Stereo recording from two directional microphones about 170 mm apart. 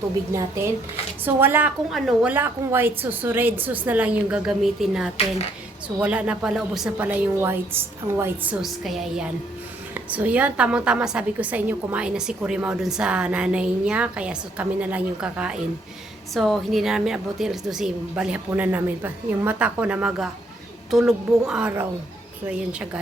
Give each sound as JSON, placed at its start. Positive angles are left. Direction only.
{"t": 0.3, "sound": "a woman's voice", "side_deg": -15}
{"t": 8.6, "sound": "a woman's voice", "side_deg": 0}